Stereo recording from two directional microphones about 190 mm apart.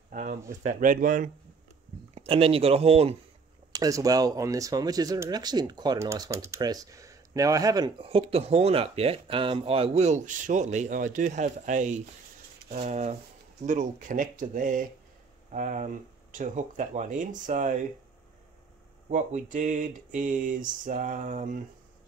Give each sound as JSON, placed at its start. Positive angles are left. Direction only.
{"t": 0.1, "sound": "a sound", "side_deg": -40}
{"t": 0.5, "sound": "speech", "side_deg": -40}
{"t": 2.1, "sound": "mantra", "side_deg": -30}
{"t": 3.7, "sound": "speech", "side_deg": -20}
{"t": 12.7, "sound": "mantra", "side_deg": -35}
{"t": 13.7, "sound": "speech", "side_deg": -40}
{"t": 15.5, "sound": "mantra", "side_deg": -40}
{"t": 19.0, "sound": "mantra", "side_deg": -40}